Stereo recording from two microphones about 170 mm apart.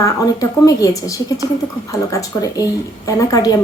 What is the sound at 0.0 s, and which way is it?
A woman's voice, 20° left (ahead or behind).